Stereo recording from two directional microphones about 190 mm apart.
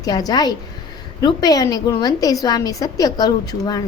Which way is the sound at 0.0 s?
20° left (ahead or behind).